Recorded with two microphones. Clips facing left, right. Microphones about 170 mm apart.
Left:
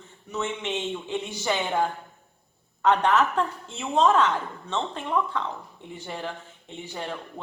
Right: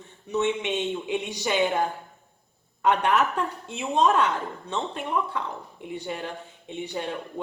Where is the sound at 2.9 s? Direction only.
10° right (ahead or behind).